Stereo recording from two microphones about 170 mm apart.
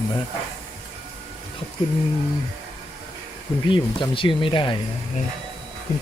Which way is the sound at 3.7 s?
30° left (ahead or behind).